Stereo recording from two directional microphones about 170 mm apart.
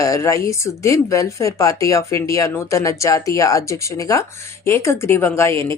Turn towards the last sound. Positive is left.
turn(degrees=15)  # may be behind; listen again after turning